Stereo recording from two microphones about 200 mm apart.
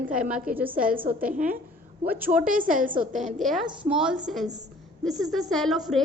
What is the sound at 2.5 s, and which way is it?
Speech, 40° right (ahead or behind).